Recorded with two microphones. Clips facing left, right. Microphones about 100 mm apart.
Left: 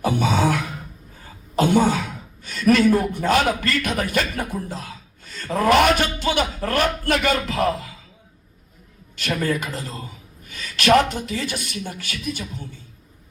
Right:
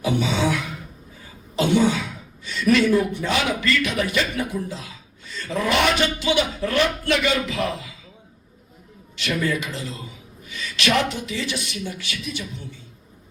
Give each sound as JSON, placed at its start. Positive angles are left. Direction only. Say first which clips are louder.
{"t": 0.0, "sound": "a man's voice", "louder": "left 2 dB", "side_deg": 50}
{"t": 9.1, "sound": "a man's voice", "louder": "left 1 dB", "side_deg": 45}